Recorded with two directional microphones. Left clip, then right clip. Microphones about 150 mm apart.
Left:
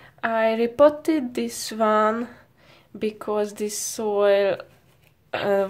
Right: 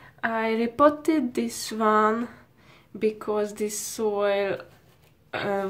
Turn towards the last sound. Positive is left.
turn(degrees=25)  # may be behind; listen again after turning